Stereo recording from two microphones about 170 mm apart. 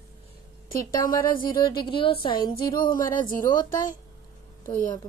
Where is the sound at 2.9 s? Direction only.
50° left (ahead or behind).